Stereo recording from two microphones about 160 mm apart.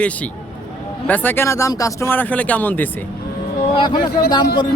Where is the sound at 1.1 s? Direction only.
10° left (ahead or behind).